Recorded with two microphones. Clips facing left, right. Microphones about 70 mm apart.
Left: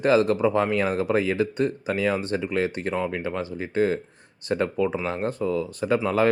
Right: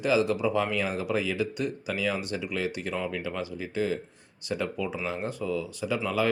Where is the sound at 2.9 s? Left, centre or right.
Left.